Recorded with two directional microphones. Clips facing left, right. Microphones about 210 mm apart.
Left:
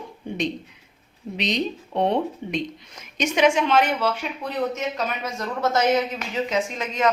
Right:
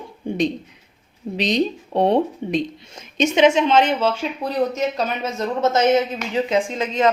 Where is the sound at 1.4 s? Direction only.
35° right (ahead or behind).